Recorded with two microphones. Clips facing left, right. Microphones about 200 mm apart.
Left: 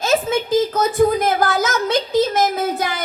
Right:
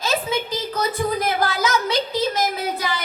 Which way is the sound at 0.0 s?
50° left (ahead or behind).